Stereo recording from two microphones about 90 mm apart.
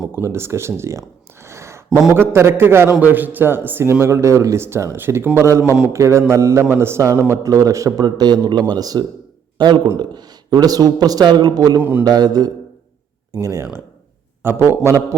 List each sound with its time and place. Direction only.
0.1 s a man's voice: 25° right (ahead or behind)
8.0 s a man's voice: 55° right (ahead or behind)
11.8 s a man's voice: 20° right (ahead or behind)
12.0 s a man's voice: 50° right (ahead or behind)
13.3 s a man's voice: 35° right (ahead or behind)